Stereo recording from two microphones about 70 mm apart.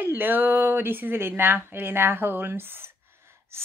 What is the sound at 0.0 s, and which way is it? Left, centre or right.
Speech, right.